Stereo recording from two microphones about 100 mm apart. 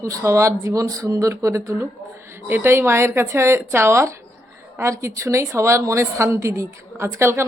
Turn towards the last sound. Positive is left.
turn(degrees=-25)  # may be behind; listen again after turning